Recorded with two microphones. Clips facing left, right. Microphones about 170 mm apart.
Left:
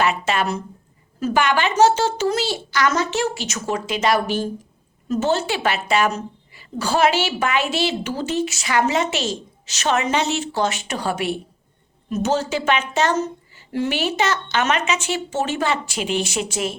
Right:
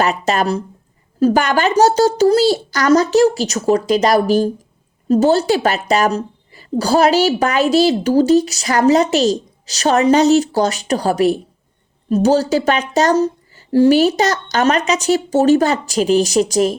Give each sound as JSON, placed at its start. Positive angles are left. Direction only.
{"t": 0.0, "sound": "a woman's voice", "side_deg": -40}